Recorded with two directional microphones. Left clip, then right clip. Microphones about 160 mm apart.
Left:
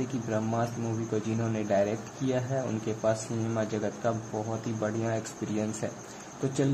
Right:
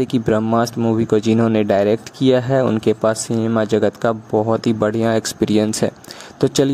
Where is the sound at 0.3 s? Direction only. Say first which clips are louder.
Right 13 dB; 90° right.